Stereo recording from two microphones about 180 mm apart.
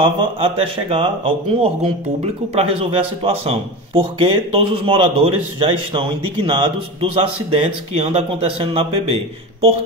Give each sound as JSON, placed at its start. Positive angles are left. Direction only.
{"t": 0.0, "sound": "a man's voice", "side_deg": -30}